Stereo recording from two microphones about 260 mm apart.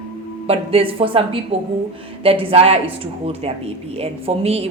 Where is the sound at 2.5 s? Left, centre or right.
Right.